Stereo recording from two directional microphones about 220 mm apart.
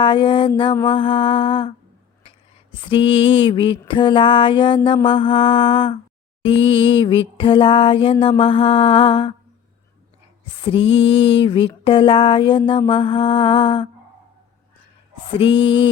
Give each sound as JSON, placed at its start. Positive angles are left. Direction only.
{"t": 0.0, "sound": "mantra", "side_deg": 20}
{"t": 2.9, "sound": "mantra", "side_deg": 25}
{"t": 10.6, "sound": "mantra", "side_deg": 25}
{"t": 15.4, "sound": "mantra", "side_deg": 25}